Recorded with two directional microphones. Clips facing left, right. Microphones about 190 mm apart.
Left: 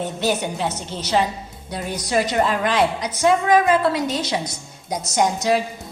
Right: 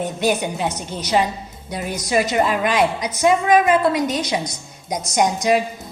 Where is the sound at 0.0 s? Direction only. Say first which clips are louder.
Right 2 dB; 10° right (ahead or behind).